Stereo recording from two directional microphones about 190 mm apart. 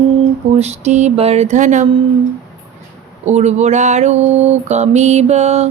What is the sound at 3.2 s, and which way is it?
Mantra, 35° right (ahead or behind).